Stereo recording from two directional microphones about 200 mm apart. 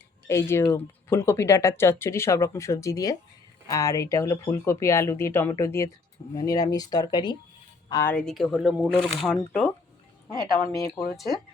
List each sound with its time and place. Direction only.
0.3 s speech: 15° left (ahead or behind)
8.1 s speech: centre (ahead or behind)
11.0 s speech: centre (ahead or behind)